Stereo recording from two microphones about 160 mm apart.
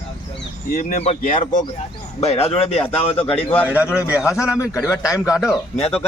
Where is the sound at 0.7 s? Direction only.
60° left (ahead or behind).